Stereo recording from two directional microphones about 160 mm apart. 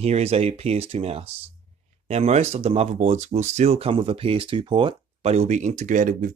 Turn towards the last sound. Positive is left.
turn(degrees=-60)  # may be behind; listen again after turning